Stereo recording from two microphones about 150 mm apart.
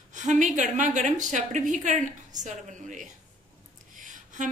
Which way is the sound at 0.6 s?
55° right (ahead or behind).